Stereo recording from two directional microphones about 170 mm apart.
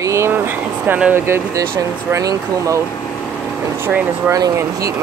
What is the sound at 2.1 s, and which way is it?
Speech, 20° right (ahead or behind).